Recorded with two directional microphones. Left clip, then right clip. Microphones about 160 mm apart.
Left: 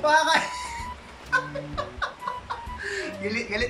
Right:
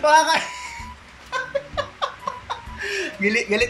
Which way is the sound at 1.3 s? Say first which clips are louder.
Right 1 dB; 20° right (ahead or behind).